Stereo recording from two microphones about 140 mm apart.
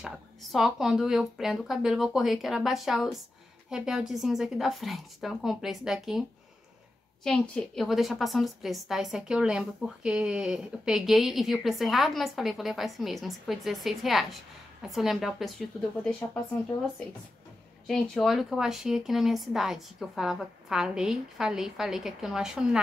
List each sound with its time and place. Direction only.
0.0 s a woman's voice: centre (ahead or behind)
7.2 s a woman's voice: 5° left (ahead or behind)
16.7 s speech: 30° left (ahead or behind)
17.8 s a woman's voice: centre (ahead or behind)